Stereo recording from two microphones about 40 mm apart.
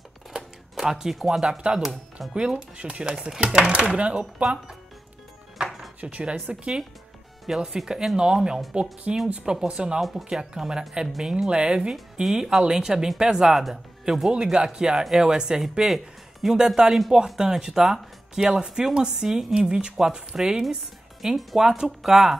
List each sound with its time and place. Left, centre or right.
0.4 s speech: centre
2.3 s a woman's voice: right
3.7 s speech: right
5.6 s music: right
6.0 s speech: right
7.4 s a woman's voice: centre
9.9 s a woman's voice: centre
11.5 s speech: right
11.9 s a woman's voice: centre
14.3 s speech: right
15.9 s music: centre
16.5 s a woman's voice: centre
18.4 s a woman's voice: right